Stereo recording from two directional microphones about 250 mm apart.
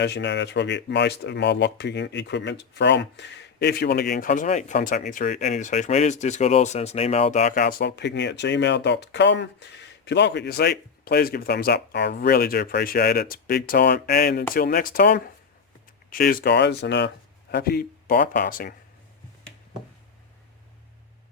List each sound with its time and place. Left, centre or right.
0.0 s speech: left